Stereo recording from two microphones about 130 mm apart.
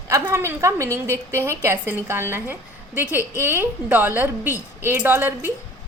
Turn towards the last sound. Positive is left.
turn(degrees=-15)  # may be behind; listen again after turning